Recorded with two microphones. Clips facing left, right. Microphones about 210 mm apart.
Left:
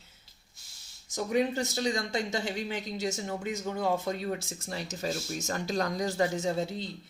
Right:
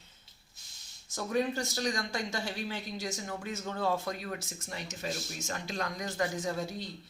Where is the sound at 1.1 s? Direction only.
20° left (ahead or behind).